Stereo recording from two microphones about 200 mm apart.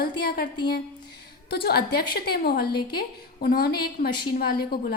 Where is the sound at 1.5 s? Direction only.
50° left (ahead or behind).